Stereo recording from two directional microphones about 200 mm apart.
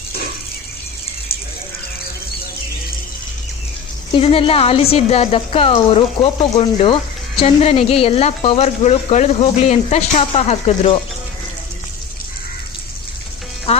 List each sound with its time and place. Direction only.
4.1 s speech: 25° left (ahead or behind)
13.7 s music: 30° left (ahead or behind)